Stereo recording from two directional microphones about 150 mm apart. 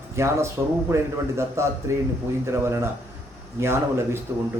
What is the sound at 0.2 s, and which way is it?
A man's voice, 15° right (ahead or behind).